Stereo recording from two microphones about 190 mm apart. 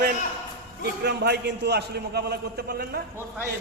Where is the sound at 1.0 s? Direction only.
60° right (ahead or behind).